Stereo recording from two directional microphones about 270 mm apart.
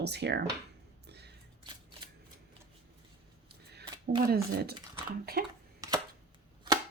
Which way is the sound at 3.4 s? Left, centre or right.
Right.